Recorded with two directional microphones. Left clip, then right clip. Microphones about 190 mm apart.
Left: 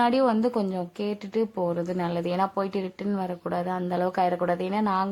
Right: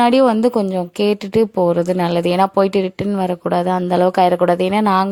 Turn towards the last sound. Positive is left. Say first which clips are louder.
# right 11 dB
turn(degrees=-40)  # may be behind; listen again after turning